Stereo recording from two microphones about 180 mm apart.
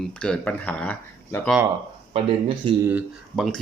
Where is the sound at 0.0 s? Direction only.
5° left (ahead or behind).